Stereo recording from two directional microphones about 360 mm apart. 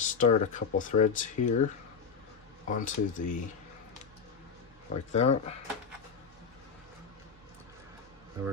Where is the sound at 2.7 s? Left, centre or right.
Left.